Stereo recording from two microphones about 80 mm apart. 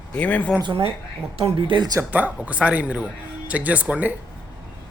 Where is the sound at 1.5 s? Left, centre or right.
Right.